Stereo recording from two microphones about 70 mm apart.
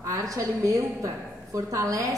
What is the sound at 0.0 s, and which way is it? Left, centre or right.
A woman's voice, right.